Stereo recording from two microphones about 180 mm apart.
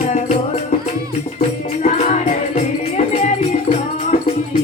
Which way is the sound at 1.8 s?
40° left (ahead or behind).